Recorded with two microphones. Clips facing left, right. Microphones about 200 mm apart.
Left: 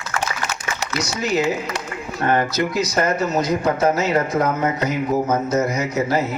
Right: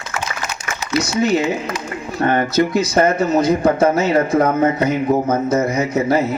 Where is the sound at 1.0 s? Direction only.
30° right (ahead or behind).